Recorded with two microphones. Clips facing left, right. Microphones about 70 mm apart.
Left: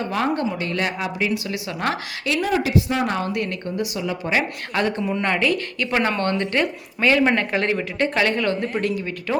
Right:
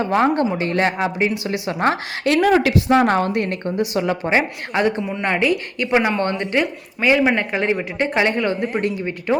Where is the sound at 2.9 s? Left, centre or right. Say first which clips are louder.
Right 7 dB; right.